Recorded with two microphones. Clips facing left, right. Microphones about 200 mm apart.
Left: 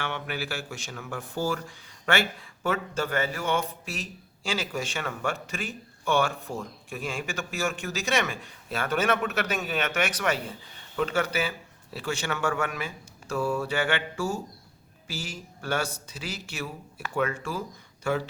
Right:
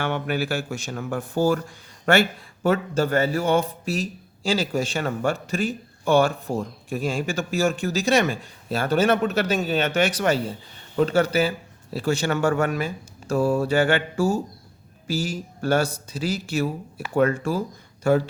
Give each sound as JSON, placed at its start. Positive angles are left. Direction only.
{"t": 0.0, "sound": "a man's voice", "side_deg": -45}
{"t": 2.6, "sound": "speech", "side_deg": -35}